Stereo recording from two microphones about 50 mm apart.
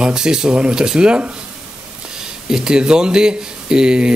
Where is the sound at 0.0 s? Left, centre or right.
Centre.